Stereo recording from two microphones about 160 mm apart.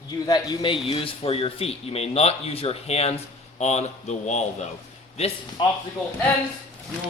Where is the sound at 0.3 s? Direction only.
25° left (ahead or behind); by 4.4 s 45° left (ahead or behind).